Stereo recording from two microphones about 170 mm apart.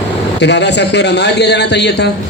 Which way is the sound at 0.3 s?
90° left.